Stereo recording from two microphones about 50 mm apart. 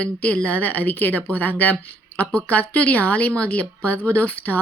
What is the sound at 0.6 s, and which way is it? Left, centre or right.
Speech, left.